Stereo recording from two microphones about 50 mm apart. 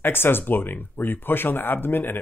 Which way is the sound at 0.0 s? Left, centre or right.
Left.